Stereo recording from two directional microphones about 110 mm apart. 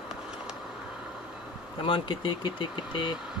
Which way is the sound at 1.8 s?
50° left (ahead or behind).